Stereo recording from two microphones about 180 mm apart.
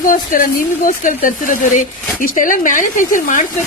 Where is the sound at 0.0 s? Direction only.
50° left (ahead or behind).